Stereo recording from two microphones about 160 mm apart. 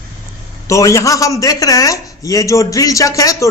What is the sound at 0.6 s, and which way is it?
A man's voice, 20° left (ahead or behind).